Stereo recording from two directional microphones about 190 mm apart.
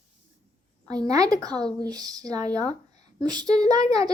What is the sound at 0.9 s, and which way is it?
Speech, 20° right (ahead or behind).